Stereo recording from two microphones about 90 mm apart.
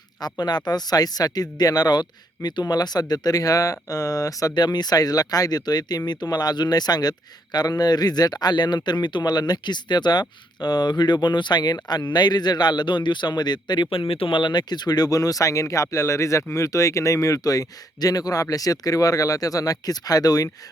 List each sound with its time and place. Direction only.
0.2 s speech: 50° left (ahead or behind)
13.9 s speech: 90° left; by 20.5 s 45° left (ahead or behind)